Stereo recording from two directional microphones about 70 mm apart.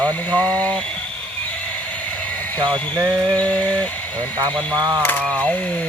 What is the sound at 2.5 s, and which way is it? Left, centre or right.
Speech, right.